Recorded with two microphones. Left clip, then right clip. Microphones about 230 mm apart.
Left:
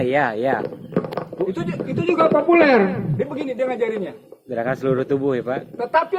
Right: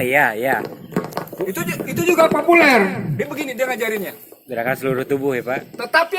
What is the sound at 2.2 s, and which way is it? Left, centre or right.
Speech, right.